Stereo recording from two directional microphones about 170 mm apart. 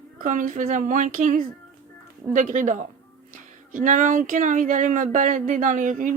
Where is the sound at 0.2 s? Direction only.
50° right (ahead or behind).